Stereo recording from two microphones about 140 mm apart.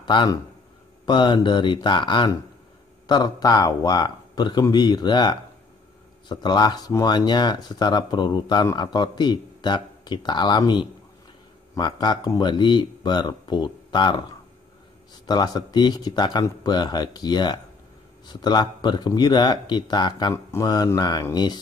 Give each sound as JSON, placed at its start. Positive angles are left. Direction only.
{"t": 0.0, "sound": "a man's voice", "side_deg": 35}
{"t": 15.2, "sound": "a man's voice", "side_deg": 30}